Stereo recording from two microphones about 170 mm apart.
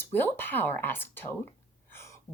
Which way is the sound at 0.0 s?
10° left (ahead or behind).